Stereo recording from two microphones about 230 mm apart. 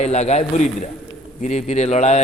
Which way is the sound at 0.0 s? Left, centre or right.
Left.